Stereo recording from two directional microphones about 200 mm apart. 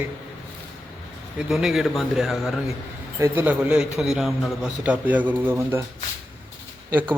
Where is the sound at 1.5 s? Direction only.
Centre (ahead or behind).